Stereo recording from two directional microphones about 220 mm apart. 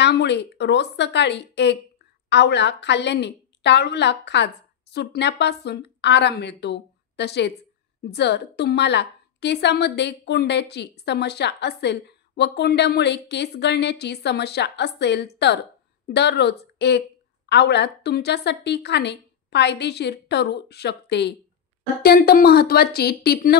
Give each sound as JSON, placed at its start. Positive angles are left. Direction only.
{"t": 0.0, "sound": "a woman's voice", "side_deg": 50}